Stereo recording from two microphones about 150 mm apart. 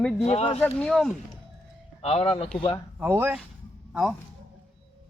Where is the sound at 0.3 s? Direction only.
45° left (ahead or behind).